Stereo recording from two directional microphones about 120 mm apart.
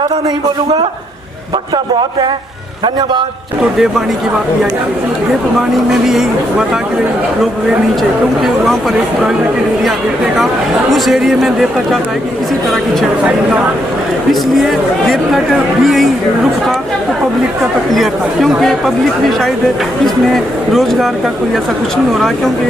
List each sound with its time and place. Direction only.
1.7 s a man's voice: 40° right (ahead or behind)
5.9 s a man's voice: 5° right (ahead or behind)
10.9 s a man's voice: centre (ahead or behind)
14.5 s a man's voice: centre (ahead or behind)
17.9 s a man's voice: centre (ahead or behind)
20.3 s a man's voice: centre (ahead or behind)